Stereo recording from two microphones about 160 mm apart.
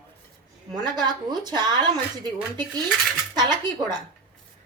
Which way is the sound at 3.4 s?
25° right (ahead or behind).